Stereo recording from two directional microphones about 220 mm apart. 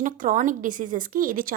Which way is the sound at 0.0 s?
35° right (ahead or behind).